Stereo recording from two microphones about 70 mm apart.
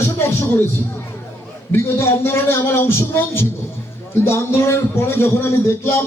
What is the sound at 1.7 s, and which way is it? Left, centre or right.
A man's voice, left.